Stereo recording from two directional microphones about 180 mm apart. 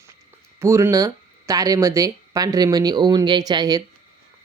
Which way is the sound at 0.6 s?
15° right (ahead or behind).